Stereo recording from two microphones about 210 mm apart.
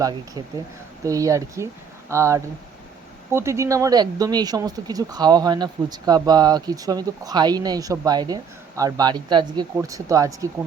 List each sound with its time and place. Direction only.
0.0 s speech: 20° right (ahead or behind)